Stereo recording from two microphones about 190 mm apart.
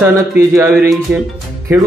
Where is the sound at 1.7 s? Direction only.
15° right (ahead or behind).